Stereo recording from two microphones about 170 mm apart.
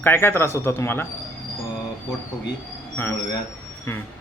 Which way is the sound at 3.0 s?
10° left (ahead or behind).